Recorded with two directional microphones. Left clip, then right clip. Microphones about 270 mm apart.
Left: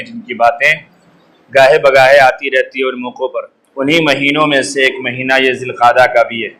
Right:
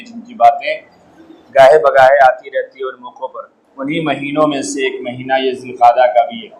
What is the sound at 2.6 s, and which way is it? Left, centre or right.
A man's voice, left.